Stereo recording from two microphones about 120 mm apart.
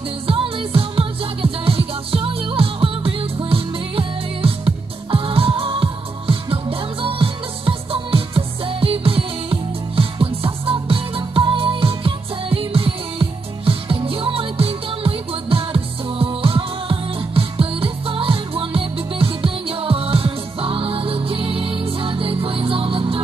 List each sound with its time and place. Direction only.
0.3 s music: 50° right (ahead or behind)